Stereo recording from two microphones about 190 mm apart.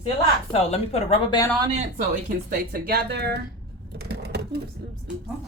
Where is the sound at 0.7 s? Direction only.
35° left (ahead or behind).